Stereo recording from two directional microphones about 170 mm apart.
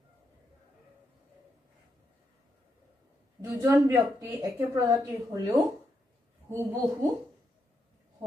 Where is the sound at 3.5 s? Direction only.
15° right (ahead or behind).